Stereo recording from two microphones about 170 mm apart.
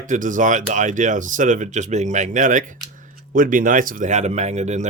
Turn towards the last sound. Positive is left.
turn(degrees=-40)  # may be behind; listen again after turning